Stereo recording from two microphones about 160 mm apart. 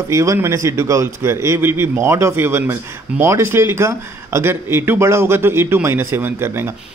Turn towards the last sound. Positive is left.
turn(degrees=-15)  # may be behind; listen again after turning